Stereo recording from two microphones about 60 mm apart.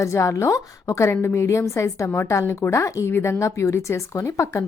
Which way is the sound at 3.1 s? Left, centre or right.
Left.